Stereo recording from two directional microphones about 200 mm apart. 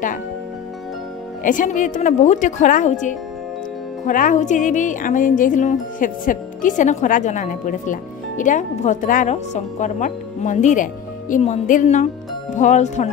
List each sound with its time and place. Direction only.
1.4 s speech: 40° left (ahead or behind)